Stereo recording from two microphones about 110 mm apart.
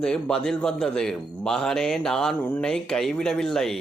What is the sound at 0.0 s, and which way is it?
A man's voice, 5° left (ahead or behind).